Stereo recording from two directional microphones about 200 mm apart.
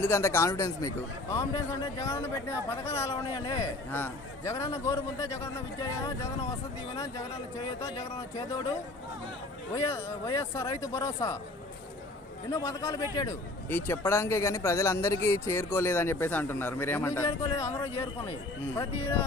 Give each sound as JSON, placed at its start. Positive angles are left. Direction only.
{"t": 0.0, "sound": "speech", "side_deg": 10}
{"t": 7.8, "sound": "speech", "side_deg": 15}
{"t": 9.7, "sound": "speech", "side_deg": 15}
{"t": 12.5, "sound": "speech", "side_deg": 15}